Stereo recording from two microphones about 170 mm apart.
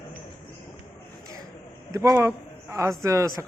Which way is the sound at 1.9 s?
20° right (ahead or behind).